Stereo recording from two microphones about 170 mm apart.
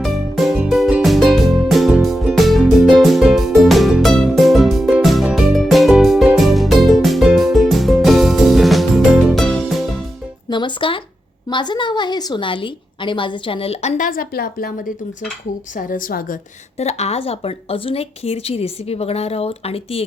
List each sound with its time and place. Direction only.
0.0 s music: centre (ahead or behind)
10.5 s music: 30° left (ahead or behind)
11.4 s a woman's voice: 25° left (ahead or behind); by 14.7 s 60° left (ahead or behind)
15.7 s a woman's voice: 55° left (ahead or behind)
16.7 s a woman's voice: 40° left (ahead or behind)